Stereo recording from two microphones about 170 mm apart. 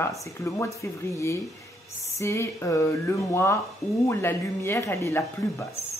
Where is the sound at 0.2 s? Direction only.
15° left (ahead or behind).